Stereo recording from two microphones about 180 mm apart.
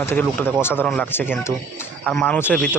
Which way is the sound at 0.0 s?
10° left (ahead or behind).